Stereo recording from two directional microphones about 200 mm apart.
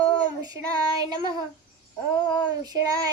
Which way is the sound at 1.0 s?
20° right (ahead or behind).